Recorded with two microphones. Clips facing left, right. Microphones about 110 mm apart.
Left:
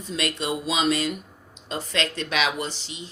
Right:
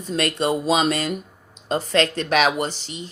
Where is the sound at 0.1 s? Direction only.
45° right (ahead or behind).